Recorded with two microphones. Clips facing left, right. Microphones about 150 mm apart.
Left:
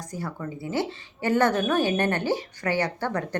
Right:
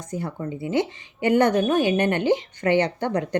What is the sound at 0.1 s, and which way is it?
A woman's voice, 20° right (ahead or behind).